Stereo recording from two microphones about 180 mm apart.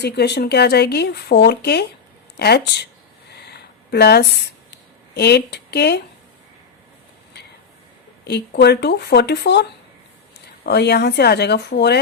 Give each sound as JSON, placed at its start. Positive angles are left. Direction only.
{"t": 0.0, "sound": "speech", "side_deg": 65}
{"t": 3.3, "sound": "a sound", "side_deg": 65}
{"t": 5.1, "sound": "speech", "side_deg": 65}
{"t": 8.3, "sound": "speech", "side_deg": 65}